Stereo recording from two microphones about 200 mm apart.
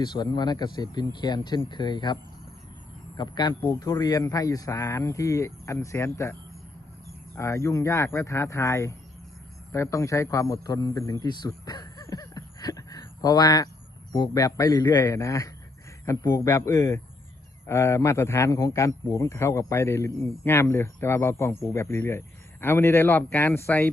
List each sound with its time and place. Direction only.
0.0 s speech: 20° left (ahead or behind)
3.2 s a man's voice: 25° left (ahead or behind)
7.3 s a man's voice: 15° left (ahead or behind)